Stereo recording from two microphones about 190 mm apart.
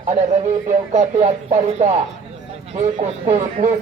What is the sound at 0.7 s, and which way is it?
Speech, 40° right (ahead or behind).